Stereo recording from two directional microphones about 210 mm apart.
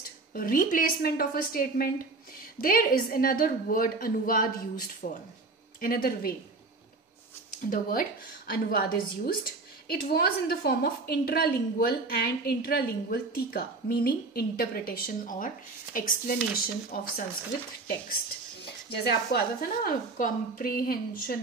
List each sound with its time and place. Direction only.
0.3 s a woman's voice: 45° left (ahead or behind)
7.7 s a woman's voice: 45° left (ahead or behind)
18.9 s a woman's voice: 50° left (ahead or behind)